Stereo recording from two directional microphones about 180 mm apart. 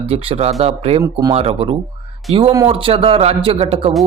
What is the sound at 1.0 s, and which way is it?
Speech, 20° right (ahead or behind).